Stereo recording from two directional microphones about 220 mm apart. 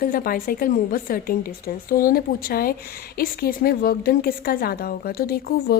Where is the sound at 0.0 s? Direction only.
40° left (ahead or behind).